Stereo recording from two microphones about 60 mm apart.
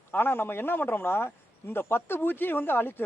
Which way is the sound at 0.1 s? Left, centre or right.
Left.